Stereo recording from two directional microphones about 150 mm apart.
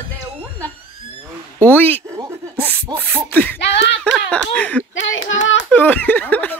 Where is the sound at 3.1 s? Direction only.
5° left (ahead or behind).